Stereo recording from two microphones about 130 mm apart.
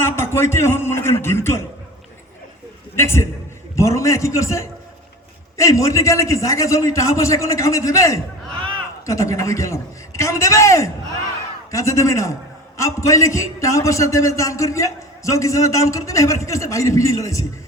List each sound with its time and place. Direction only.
0.0 s a man's voice: 20° left (ahead or behind)
2.9 s a man's voice: 20° left (ahead or behind)